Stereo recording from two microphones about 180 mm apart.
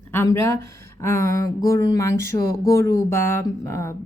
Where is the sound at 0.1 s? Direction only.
15° left (ahead or behind).